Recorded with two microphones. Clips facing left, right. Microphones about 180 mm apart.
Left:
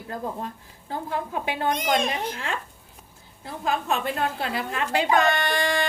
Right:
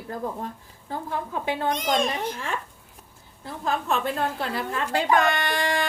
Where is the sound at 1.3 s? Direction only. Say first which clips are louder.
Right 1 dB; 15° left (ahead or behind).